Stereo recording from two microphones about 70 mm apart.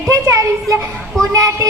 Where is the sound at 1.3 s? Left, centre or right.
Right.